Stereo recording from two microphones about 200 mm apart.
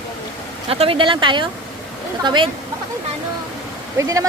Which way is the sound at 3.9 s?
15° right (ahead or behind).